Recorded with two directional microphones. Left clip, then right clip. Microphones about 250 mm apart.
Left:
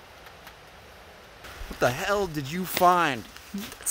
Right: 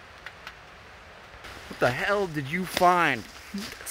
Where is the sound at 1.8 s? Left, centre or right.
Centre.